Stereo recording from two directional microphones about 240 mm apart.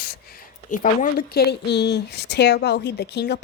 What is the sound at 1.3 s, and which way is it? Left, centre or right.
Speech, left.